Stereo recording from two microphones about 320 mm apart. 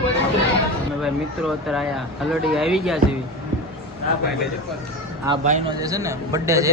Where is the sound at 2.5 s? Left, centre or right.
Centre.